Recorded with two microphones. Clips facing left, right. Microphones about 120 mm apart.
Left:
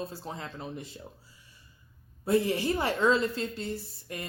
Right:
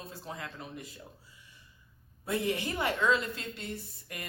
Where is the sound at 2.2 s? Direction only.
35° left (ahead or behind).